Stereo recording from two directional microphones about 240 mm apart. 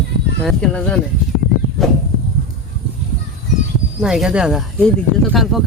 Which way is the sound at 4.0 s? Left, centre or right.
Centre.